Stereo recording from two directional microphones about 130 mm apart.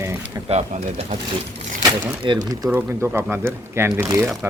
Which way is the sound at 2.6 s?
30° right (ahead or behind).